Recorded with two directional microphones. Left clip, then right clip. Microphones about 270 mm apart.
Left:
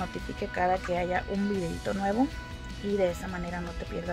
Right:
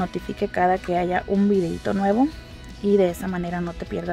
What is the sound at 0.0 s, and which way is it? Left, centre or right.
Speech, right.